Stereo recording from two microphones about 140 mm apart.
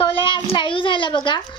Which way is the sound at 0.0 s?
40° left (ahead or behind).